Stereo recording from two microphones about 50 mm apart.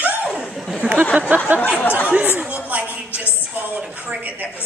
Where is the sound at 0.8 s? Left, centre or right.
Right.